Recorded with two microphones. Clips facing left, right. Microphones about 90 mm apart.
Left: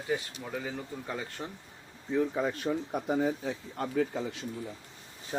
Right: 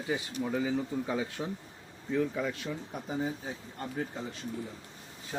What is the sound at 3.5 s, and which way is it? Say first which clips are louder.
Speech: left 5 dB; 90° left.